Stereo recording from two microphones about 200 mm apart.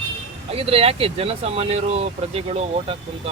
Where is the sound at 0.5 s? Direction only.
30° right (ahead or behind).